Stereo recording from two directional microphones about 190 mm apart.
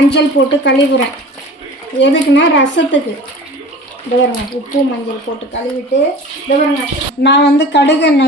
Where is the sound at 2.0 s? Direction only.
75° left (ahead or behind).